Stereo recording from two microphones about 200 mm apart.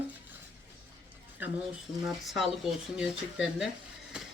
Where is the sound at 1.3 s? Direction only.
5° right (ahead or behind).